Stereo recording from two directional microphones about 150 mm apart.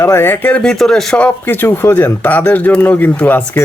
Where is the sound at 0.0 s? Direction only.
15° left (ahead or behind).